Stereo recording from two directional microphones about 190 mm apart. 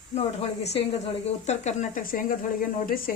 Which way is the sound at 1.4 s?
35° left (ahead or behind).